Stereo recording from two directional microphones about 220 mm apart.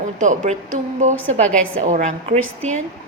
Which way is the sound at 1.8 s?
35° right (ahead or behind).